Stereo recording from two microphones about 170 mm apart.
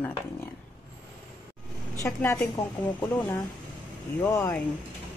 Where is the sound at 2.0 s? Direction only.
15° left (ahead or behind).